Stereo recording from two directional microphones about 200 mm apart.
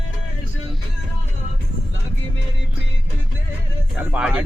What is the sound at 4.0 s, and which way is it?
Music, 5° right (ahead or behind).